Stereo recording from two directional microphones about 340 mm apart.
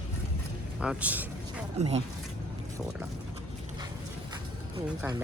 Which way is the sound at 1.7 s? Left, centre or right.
Centre.